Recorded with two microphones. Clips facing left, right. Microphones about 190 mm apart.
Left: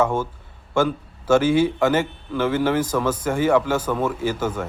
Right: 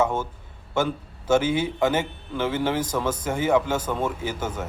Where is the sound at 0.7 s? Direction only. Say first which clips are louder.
Left 4 dB; 20° right (ahead or behind).